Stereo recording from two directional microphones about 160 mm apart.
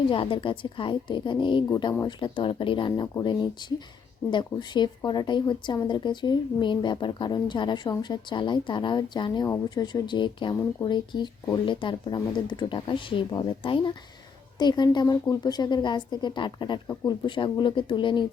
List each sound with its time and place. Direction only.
0.1 s a woman's voice: 35° left (ahead or behind)